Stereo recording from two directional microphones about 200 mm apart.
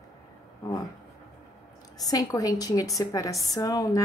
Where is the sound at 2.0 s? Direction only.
15° left (ahead or behind).